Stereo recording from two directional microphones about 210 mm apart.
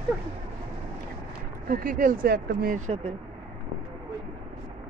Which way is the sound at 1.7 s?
40° right (ahead or behind).